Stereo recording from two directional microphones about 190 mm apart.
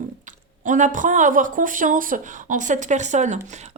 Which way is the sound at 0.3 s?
40° right (ahead or behind).